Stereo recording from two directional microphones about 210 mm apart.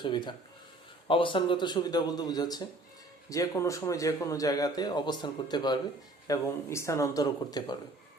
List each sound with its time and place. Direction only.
0.0 s speech: 20° left (ahead or behind)